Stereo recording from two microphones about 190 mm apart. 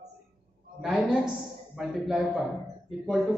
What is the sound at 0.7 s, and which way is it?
Speech, 5° right (ahead or behind).